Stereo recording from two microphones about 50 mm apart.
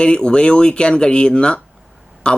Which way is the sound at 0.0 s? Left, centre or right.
Centre.